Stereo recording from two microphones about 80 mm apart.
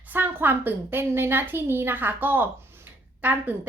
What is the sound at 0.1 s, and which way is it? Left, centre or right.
A woman's voice, right.